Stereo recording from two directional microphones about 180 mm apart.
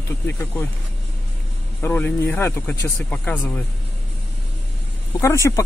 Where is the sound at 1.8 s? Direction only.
10° left (ahead or behind).